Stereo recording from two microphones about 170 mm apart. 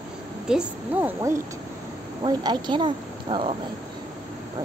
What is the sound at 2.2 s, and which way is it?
Speech, 25° right (ahead or behind).